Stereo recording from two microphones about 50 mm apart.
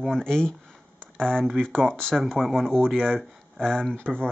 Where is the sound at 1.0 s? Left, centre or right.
Centre.